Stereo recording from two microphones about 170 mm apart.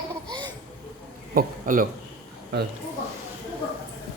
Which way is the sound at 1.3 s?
55° right (ahead or behind).